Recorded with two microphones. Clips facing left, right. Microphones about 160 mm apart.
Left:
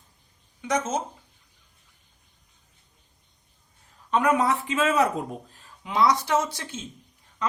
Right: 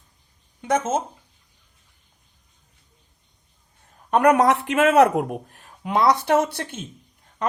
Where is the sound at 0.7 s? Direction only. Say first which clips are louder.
Right 4 dB; 55° right (ahead or behind).